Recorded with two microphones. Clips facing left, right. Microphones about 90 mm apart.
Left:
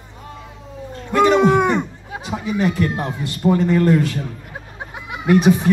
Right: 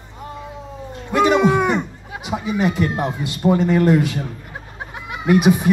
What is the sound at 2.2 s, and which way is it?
A man's voice, 15° right (ahead or behind).